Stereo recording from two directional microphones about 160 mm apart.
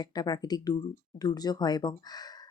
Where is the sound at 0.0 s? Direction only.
25° left (ahead or behind).